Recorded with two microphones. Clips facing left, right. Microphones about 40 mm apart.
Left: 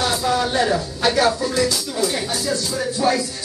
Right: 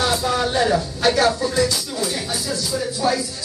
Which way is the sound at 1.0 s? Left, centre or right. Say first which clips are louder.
Even; centre.